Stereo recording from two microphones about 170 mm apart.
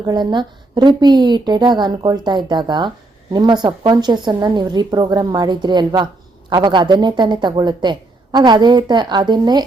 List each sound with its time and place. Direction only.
0.0 s a woman's voice: 25° right (ahead or behind)